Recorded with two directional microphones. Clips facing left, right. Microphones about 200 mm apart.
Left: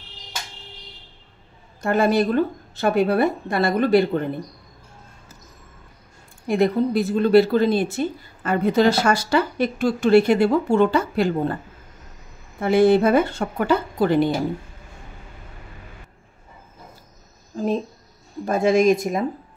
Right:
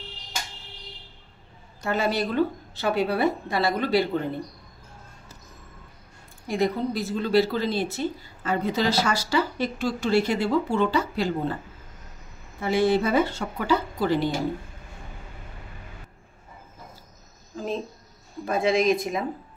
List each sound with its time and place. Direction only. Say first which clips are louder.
1.8 s a woman's voice: left 7 dB; 55° left (ahead or behind)
6.4 s speech: left 6 dB; 60° left (ahead or behind)
12.5 s speech: left 6 dB; 55° left (ahead or behind)
18.4 s a woman's voice: left 5 dB; 45° left (ahead or behind)